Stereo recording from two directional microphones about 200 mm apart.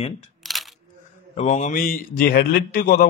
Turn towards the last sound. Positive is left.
turn(degrees=50)  # may be behind; listen again after turning